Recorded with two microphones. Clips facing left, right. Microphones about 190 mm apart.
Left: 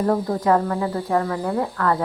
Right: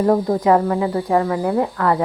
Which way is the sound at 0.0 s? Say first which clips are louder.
Right 4 dB; 15° right (ahead or behind).